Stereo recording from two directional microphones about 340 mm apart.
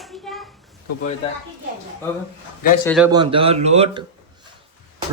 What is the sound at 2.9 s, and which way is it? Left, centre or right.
Speech, centre.